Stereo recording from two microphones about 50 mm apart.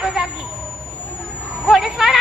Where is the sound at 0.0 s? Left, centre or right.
Centre.